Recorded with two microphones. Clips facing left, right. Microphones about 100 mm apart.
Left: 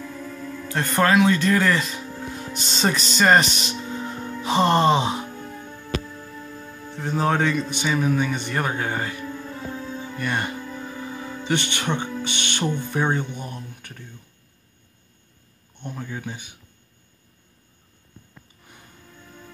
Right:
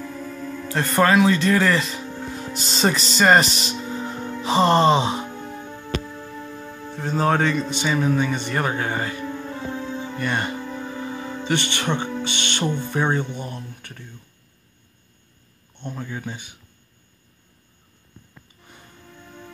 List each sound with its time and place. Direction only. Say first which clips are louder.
0.0 s speech: right 2 dB; 5° right (ahead or behind)
4.4 s music: right 2 dB; centre (ahead or behind)
5.2 s music: right 2 dB; 25° right (ahead or behind)
7.2 s music: right 1 dB; centre (ahead or behind)
7.5 s speech: right 1 dB; 30° right (ahead or behind)
7.8 s music: right 1 dB; centre (ahead or behind)
9.2 s music: right 3 dB; 25° right (ahead or behind)
10.1 s music: right 1 dB; 5° left (ahead or behind)
10.5 s music: right 3 dB; 25° right (ahead or behind)
11.4 s speech: right 1 dB; 10° left (ahead or behind)
12.6 s speech: even; 20° right (ahead or behind)
12.9 s speech: right 1 dB; 10° left (ahead or behind)
15.8 s music: right 1 dB; 5° left (ahead or behind)